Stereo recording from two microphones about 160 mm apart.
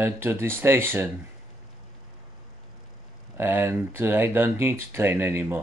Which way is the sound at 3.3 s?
15° right (ahead or behind).